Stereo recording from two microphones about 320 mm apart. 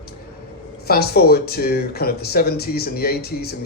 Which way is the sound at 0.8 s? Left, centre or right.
Left.